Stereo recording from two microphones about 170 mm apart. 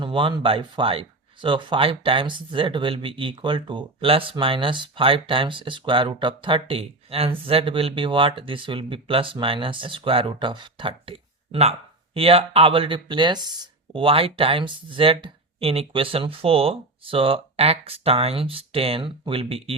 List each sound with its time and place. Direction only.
0.0 s speech: 30° right (ahead or behind)